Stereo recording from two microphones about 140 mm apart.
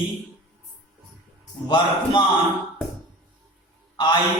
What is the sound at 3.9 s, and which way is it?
Speech, 30° left (ahead or behind).